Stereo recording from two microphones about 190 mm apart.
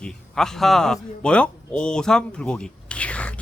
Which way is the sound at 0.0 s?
5° left (ahead or behind).